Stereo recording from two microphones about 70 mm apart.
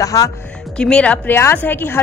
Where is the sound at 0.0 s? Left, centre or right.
Left.